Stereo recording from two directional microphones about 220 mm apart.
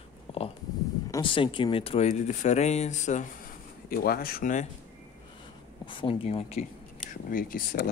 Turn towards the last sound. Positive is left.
turn(degrees=40)  # may be behind; listen again after turning